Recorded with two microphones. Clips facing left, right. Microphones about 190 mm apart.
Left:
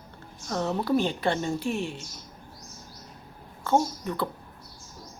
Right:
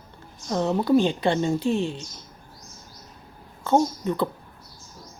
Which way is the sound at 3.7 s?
20° right (ahead or behind).